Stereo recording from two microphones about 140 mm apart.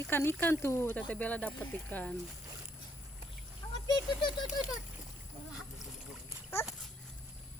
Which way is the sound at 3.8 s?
30° left (ahead or behind).